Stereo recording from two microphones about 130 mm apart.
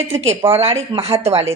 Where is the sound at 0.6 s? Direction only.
50° right (ahead or behind).